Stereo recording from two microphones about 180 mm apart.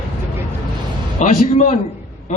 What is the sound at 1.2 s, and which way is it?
Speech, 40° left (ahead or behind).